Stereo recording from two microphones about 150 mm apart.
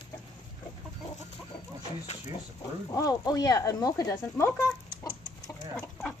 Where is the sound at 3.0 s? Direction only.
25° left (ahead or behind).